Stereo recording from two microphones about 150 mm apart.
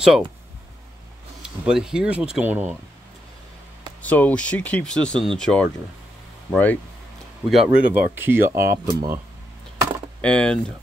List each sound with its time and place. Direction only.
1.4 s speech: 5° right (ahead or behind)
4.0 s speech: 10° left (ahead or behind)
7.4 s speech: 5° right (ahead or behind); by 9.2 s 20° right (ahead or behind)
10.2 s speech: 5° left (ahead or behind)